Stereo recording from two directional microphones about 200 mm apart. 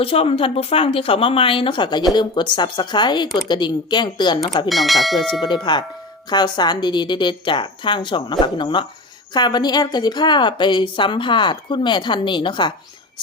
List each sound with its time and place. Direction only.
0.0 s a woman's voice: 30° left (ahead or behind)
4.7 s speech: centre (ahead or behind)
5.7 s a woman's voice: 20° left (ahead or behind)